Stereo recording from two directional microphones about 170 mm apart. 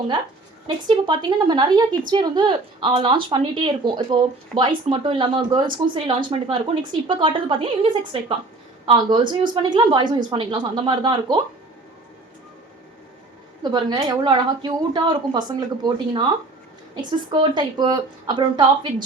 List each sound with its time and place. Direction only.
0.9 s speech: 25° right (ahead or behind)
13.6 s speech: 25° right (ahead or behind)